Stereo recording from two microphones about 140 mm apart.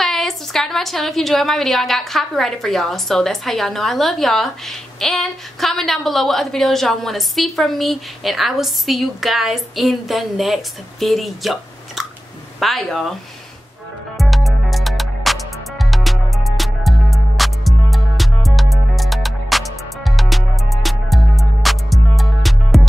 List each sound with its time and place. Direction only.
0.0 s a woman's voice: centre (ahead or behind)
14.1 s music: centre (ahead or behind)